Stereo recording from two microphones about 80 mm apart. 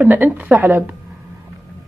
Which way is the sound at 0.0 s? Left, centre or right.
Right.